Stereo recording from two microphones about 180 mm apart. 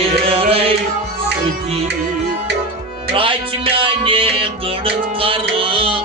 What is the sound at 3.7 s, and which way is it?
Music, 30° right (ahead or behind).